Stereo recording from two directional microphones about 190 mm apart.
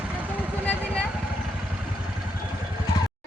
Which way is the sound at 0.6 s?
5° left (ahead or behind).